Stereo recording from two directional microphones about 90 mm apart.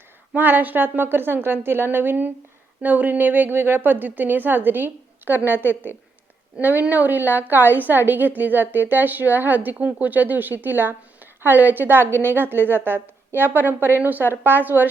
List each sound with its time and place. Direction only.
0.3 s a woman's voice: 20° right (ahead or behind)